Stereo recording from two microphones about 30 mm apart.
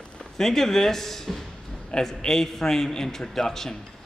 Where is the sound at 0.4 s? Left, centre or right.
Centre.